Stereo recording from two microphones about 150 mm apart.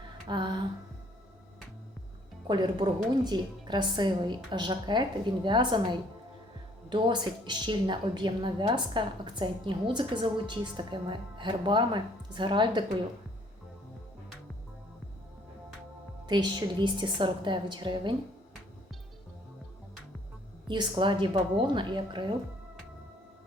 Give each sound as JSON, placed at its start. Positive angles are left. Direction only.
{"t": 0.3, "sound": "a woman's voice", "side_deg": -30}
{"t": 2.5, "sound": "a woman's voice", "side_deg": -30}
{"t": 16.2, "sound": "a woman's voice", "side_deg": -30}
{"t": 20.7, "sound": "a woman's voice", "side_deg": -30}